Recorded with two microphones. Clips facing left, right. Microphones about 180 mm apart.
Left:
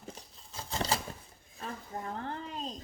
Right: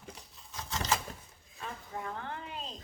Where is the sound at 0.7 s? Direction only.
35° left (ahead or behind).